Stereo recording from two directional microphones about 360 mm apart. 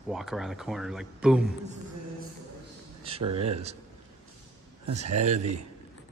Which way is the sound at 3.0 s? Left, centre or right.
Centre.